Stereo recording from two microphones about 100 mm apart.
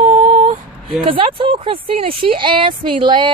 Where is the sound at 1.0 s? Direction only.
60° right (ahead or behind).